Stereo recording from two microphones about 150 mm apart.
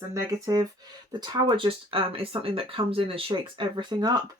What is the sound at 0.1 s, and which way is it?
Speech, 25° right (ahead or behind).